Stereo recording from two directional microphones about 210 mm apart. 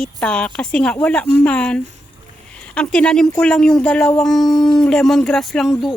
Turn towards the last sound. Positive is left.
turn(degrees=0)  # may be behind; listen again after turning